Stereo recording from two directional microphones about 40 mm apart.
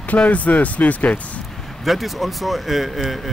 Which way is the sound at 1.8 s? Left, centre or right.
Centre.